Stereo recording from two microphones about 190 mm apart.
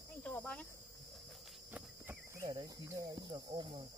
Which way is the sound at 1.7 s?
10° right (ahead or behind).